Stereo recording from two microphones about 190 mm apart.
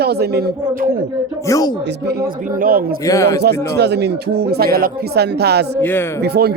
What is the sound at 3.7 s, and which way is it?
Speech, 60° right (ahead or behind).